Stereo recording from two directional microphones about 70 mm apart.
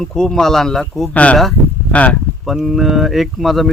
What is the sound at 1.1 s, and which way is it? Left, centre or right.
Speech, centre.